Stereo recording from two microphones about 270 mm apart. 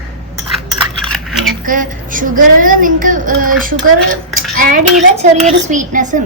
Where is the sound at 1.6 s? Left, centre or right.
Right.